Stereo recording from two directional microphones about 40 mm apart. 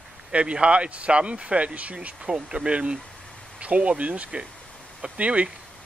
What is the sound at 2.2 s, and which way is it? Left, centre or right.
Speech, right.